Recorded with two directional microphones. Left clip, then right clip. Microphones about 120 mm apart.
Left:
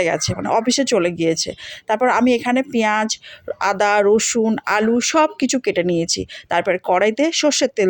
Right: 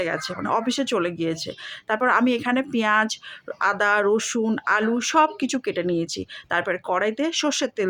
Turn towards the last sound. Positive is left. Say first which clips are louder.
# left 7 dB
turn(degrees=35)  # may be behind; listen again after turning